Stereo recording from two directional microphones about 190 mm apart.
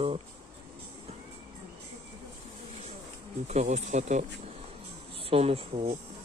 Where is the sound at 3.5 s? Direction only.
40° right (ahead or behind).